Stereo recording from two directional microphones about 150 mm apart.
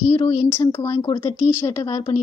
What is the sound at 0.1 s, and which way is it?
A woman's voice, 20° left (ahead or behind).